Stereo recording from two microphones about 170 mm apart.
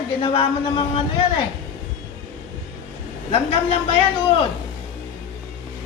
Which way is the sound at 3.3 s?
35° left (ahead or behind).